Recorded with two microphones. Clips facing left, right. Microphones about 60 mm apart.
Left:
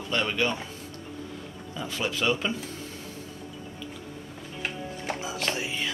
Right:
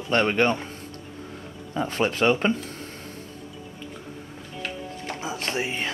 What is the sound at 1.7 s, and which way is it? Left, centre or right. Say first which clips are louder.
Speech: right 6 dB; right.